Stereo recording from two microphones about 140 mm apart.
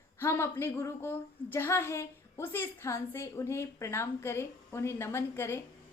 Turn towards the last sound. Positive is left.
turn(degrees=20)  # may be behind; listen again after turning